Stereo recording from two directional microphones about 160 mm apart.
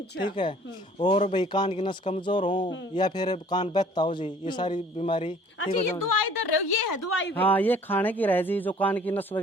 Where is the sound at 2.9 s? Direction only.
25° left (ahead or behind).